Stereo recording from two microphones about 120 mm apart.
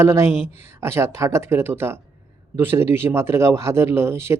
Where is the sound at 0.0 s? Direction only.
25° right (ahead or behind).